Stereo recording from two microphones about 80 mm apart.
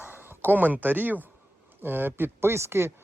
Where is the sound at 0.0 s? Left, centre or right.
Right.